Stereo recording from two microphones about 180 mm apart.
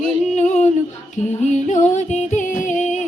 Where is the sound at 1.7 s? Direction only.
40° left (ahead or behind).